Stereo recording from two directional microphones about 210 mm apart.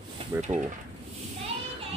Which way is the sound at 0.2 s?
25° right (ahead or behind).